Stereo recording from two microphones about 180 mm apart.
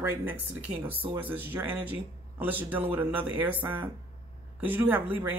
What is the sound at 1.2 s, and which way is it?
Speech, 10° right (ahead or behind).